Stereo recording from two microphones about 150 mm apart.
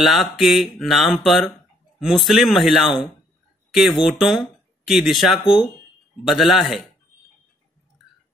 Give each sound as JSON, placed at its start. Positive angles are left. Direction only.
{"t": 0.0, "sound": "speech", "side_deg": 0}